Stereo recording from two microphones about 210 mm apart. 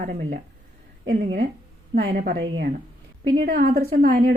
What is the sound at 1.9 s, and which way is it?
A woman's voice, 50° right (ahead or behind).